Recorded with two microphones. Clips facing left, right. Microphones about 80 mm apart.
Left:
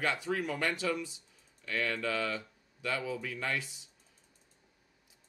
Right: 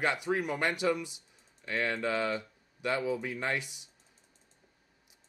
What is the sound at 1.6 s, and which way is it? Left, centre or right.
Speech, right.